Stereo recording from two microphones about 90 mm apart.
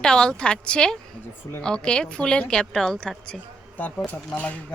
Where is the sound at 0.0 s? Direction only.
10° left (ahead or behind).